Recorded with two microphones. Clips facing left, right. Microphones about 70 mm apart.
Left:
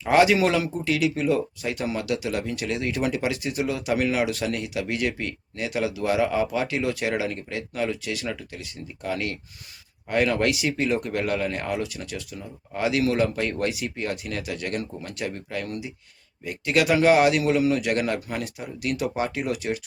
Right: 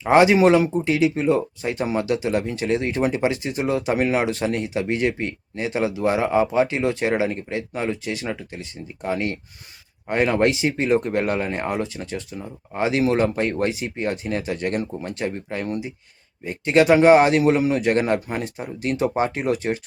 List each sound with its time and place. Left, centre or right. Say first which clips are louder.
0.0 s a man's voice: right 4 dB; right